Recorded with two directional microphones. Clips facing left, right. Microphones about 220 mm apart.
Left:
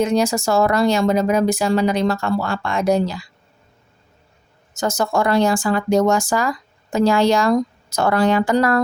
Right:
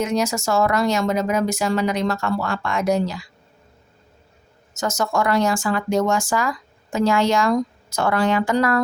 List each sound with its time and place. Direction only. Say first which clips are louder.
0.0 s speech: left 4 dB; 30° left (ahead or behind)
4.7 s speech: left 3 dB; 35° left (ahead or behind)